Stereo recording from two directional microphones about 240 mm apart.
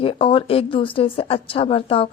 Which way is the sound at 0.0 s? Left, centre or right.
Left.